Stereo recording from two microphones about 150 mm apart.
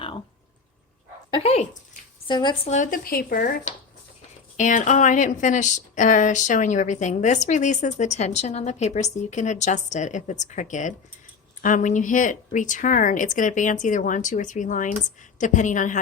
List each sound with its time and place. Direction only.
1.3 s speech: 40° left (ahead or behind)
2.2 s speech: 30° left (ahead or behind)
2.6 s speech: 55° left (ahead or behind)